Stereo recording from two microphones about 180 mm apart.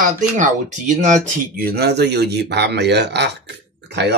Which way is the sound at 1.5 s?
60° right (ahead or behind).